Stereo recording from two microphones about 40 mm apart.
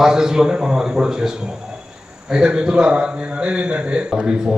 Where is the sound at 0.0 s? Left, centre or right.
Centre.